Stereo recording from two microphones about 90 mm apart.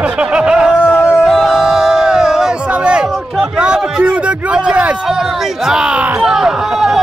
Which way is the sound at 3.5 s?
10° right (ahead or behind).